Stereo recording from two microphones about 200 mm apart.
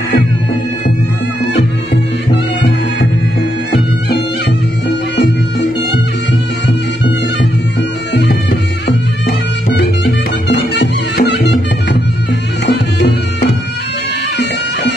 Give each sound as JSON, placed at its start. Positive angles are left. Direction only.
{"t": 4.8, "sound": "music", "side_deg": 60}
{"t": 8.1, "sound": "music", "side_deg": 60}
{"t": 10.7, "sound": "music", "side_deg": 55}